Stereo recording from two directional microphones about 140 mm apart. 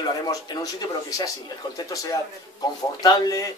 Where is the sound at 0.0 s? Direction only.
30° left (ahead or behind).